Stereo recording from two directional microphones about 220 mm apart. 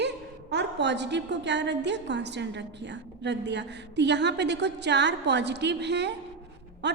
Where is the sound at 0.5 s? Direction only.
50° right (ahead or behind).